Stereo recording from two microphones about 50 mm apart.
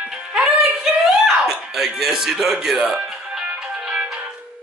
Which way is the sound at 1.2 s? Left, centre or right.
Centre.